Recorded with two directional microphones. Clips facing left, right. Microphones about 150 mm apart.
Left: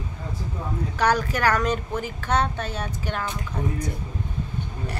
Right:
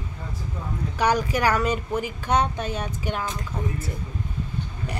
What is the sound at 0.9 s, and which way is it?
Speech, 10° right (ahead or behind).